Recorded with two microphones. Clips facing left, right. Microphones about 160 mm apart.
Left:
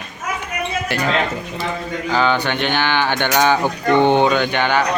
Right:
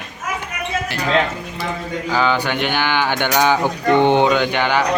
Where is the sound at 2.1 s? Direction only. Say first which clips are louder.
Left 1 dB; 10° right (ahead or behind).